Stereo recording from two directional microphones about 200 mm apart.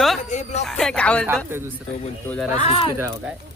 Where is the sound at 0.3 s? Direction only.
35° left (ahead or behind).